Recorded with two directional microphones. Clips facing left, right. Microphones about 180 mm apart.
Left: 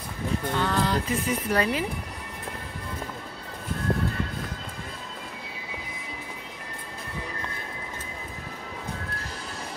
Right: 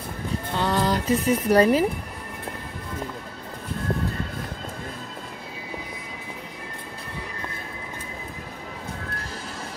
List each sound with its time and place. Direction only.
0.6 s speech: 40° right (ahead or behind)